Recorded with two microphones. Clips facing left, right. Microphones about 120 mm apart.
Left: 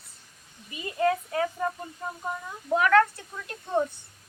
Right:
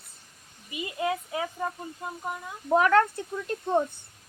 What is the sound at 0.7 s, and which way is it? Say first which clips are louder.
Speech: left 4 dB; 15° right (ahead or behind).